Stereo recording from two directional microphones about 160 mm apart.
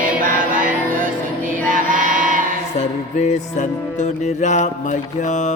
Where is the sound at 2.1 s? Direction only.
55° right (ahead or behind).